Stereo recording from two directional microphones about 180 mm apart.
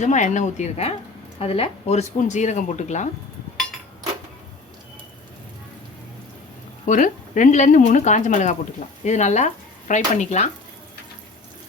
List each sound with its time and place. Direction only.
0.0 s speech: 40° left (ahead or behind)
6.8 s speech: 45° left (ahead or behind)